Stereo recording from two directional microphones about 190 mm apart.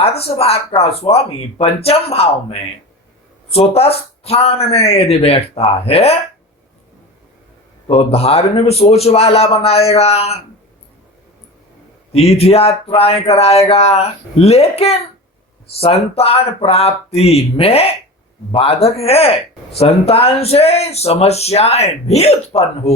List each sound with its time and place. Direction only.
0.2 s speech: 30° left (ahead or behind)
7.9 s speech: 30° left (ahead or behind)
12.1 s speech: 35° left (ahead or behind)